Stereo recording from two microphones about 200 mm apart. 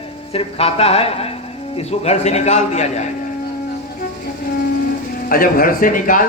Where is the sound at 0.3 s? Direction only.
30° left (ahead or behind).